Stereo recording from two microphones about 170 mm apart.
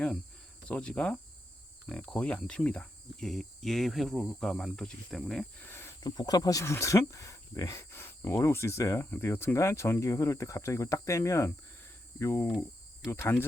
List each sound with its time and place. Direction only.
0.7 s speech: 5° left (ahead or behind)
1.9 s cricket: 5° left (ahead or behind)
6.1 s speech: 20° left (ahead or behind)
12.5 s cricket: centre (ahead or behind)
13.1 s speech: 15° left (ahead or behind)